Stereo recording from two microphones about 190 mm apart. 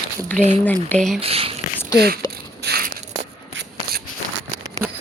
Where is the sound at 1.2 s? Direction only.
30° right (ahead or behind).